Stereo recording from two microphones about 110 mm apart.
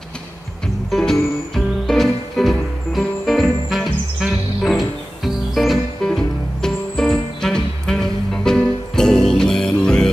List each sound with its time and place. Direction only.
0.8 s music: 5° left (ahead or behind)